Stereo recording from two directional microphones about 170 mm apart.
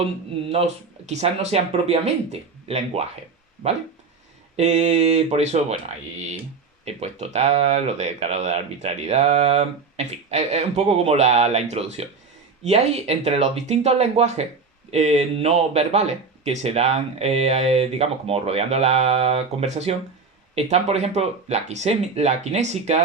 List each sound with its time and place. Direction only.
0.5 s speech: 40° right (ahead or behind)
4.5 s speech: 40° right (ahead or behind)